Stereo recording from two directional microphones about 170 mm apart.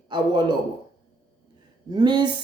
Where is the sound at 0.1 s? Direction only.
25° right (ahead or behind).